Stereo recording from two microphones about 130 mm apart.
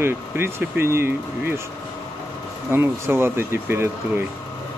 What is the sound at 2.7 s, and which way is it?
Speech, 20° right (ahead or behind).